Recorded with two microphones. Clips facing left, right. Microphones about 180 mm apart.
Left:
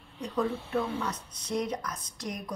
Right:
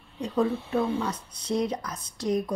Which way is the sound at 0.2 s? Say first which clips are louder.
Right 5 dB; 30° right (ahead or behind).